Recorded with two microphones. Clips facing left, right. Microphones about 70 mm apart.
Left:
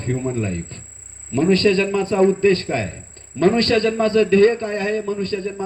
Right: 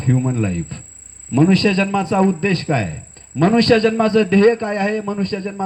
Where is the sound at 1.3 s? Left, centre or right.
Left.